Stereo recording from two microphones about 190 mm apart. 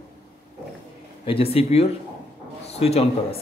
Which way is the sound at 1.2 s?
30° left (ahead or behind).